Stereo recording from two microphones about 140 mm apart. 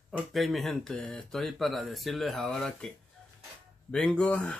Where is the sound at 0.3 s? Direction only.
Centre (ahead or behind).